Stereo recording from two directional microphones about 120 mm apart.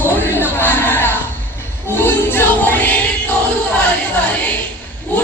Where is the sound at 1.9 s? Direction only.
15° left (ahead or behind).